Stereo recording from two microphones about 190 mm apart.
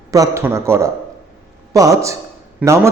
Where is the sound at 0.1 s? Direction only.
15° right (ahead or behind).